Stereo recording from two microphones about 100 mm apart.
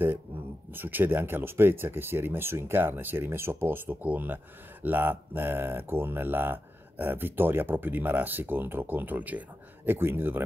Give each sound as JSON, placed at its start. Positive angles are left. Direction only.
{"t": 0.7, "sound": "speech", "side_deg": -20}